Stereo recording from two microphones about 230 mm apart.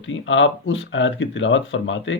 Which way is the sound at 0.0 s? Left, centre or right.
Left.